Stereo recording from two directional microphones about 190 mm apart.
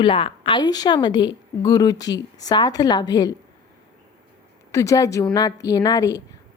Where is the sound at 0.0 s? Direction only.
30° left (ahead or behind).